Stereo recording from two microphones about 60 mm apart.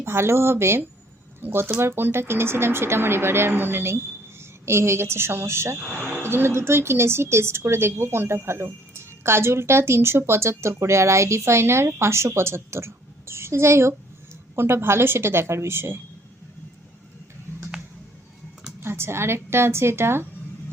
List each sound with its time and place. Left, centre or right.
0.0 s speech: right
18.8 s speech: right